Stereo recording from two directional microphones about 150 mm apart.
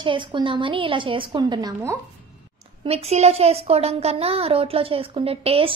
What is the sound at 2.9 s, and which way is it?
A child's voice, 45° right (ahead or behind).